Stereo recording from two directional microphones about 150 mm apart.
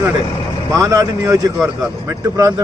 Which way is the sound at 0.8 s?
20° right (ahead or behind).